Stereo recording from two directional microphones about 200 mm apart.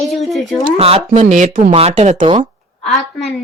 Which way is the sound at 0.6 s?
30° right (ahead or behind).